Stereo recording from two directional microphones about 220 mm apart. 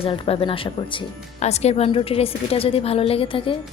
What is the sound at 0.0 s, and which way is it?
A woman's voice, 25° left (ahead or behind).